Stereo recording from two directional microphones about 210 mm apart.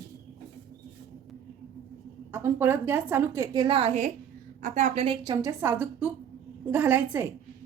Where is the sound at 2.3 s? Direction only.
10° right (ahead or behind).